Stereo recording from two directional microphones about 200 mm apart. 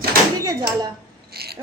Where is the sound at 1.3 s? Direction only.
50° right (ahead or behind).